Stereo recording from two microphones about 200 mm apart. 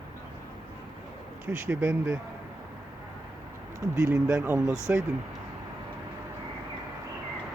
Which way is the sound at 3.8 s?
15° right (ahead or behind).